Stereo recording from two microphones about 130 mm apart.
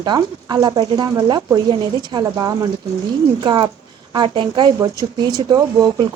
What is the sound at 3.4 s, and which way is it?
A woman's voice, 40° right (ahead or behind).